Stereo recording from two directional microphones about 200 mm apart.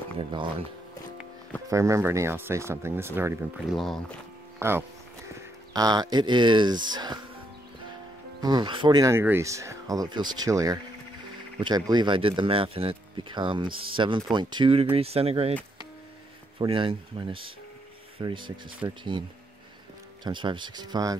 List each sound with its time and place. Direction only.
0.2 s speech: 25° right (ahead or behind)
1.7 s speech: 15° right (ahead or behind)
3.7 s speech: centre (ahead or behind)
4.6 s speech: 10° right (ahead or behind)
8.4 s speech: 20° right (ahead or behind)
16.5 s speech: 25° right (ahead or behind)
20.2 s speech: 25° right (ahead or behind)